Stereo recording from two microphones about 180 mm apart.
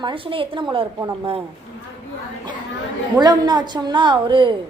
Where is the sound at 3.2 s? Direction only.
20° right (ahead or behind).